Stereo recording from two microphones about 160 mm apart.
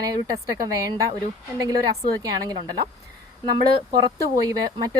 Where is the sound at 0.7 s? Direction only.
20° right (ahead or behind).